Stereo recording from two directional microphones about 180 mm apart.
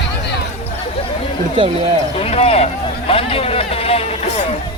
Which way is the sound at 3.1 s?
30° left (ahead or behind).